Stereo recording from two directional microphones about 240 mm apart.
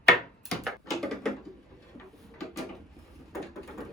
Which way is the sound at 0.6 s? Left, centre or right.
Centre.